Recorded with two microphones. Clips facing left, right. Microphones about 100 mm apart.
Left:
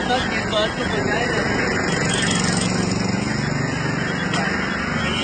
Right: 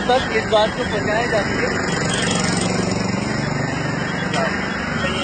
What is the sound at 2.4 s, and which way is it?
Vehicle, 90° right.